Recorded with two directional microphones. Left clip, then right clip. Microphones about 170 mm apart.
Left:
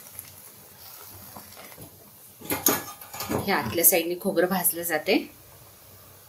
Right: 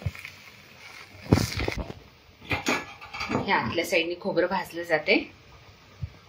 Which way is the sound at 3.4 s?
50° left (ahead or behind).